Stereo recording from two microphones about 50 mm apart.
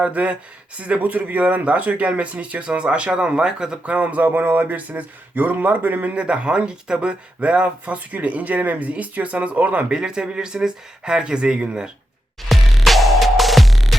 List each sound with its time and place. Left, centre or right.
0.0 s speech: right
3.9 s speech: right
9.9 s speech: centre
12.4 s music: centre